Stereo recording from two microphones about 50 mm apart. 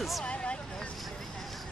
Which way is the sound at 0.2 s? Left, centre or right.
Left.